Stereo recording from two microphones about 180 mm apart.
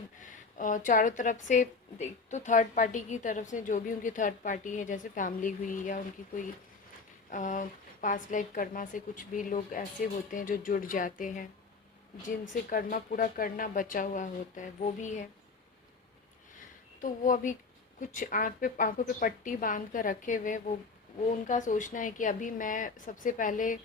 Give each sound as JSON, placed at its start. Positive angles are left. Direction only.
{"t": 0.2, "sound": "speech", "side_deg": 45}
{"t": 12.7, "sound": "speech", "side_deg": 50}
{"t": 17.0, "sound": "speech", "side_deg": 45}